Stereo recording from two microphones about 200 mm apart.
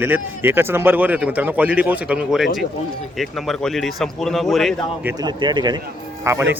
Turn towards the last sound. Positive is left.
turn(degrees=-10)  # may be behind; listen again after turning